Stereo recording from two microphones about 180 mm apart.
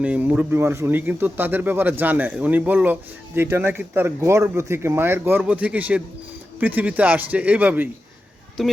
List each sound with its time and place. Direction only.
0.0 s speech: 10° right (ahead or behind)